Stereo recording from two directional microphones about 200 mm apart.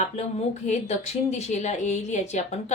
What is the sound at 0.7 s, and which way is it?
Speech, 35° left (ahead or behind).